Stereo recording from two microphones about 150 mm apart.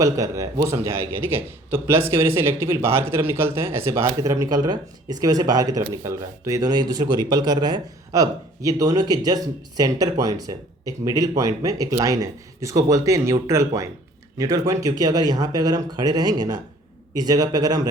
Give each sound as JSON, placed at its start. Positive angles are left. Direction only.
{"t": 0.0, "sound": "a man's voice", "side_deg": -20}